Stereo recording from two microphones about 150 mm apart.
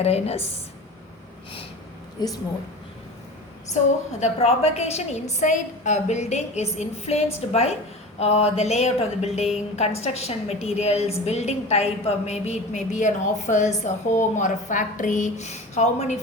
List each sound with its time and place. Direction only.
0.0 s a woman's voice: 45° left (ahead or behind)
2.2 s a woman's voice: 30° left (ahead or behind)
4.2 s a woman's voice: 45° left (ahead or behind)